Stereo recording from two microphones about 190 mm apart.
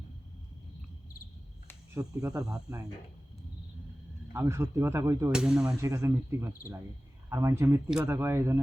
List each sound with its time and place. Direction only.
2.0 s speech: 15° right (ahead or behind)
4.3 s speech: 15° right (ahead or behind)
5.3 s speech: 5° right (ahead or behind)
5.6 s speech: 15° right (ahead or behind)